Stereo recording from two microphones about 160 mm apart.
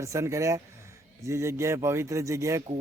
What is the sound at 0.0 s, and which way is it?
A man's voice, 20° right (ahead or behind).